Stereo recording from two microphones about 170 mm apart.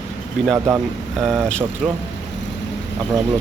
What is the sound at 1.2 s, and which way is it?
Speech, centre (ahead or behind).